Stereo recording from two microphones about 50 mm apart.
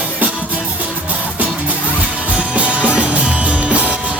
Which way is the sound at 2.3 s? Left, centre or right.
Right.